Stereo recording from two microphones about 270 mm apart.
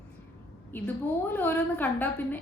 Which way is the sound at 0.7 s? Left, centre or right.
Centre.